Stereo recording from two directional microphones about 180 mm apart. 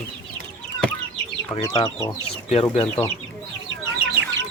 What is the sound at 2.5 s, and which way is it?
Speech, 35° left (ahead or behind).